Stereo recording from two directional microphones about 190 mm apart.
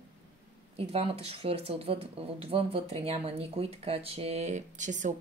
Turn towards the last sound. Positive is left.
turn(degrees=-40)  # may be behind; listen again after turning